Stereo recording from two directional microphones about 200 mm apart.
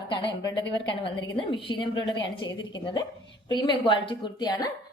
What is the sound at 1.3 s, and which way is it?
A woman's voice, 25° left (ahead or behind).